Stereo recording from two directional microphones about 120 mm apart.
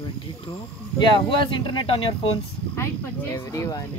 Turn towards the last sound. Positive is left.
turn(degrees=30)  # may be behind; listen again after turning